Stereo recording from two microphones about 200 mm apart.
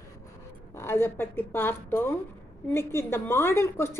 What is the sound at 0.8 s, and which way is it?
A woman's voice, 10° left (ahead or behind).